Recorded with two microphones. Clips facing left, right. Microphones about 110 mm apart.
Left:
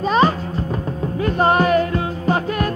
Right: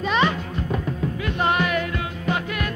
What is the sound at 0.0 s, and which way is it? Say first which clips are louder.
Music: left 5 dB; 40° left (ahead or behind).